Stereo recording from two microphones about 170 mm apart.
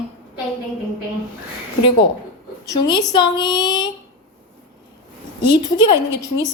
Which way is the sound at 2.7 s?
25° left (ahead or behind).